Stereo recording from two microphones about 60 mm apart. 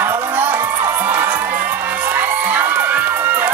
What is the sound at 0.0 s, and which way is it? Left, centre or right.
Crowd, right.